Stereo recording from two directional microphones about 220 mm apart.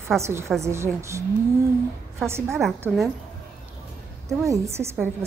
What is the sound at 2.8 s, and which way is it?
Speech, centre (ahead or behind).